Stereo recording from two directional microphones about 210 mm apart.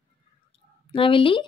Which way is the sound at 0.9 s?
25° left (ahead or behind).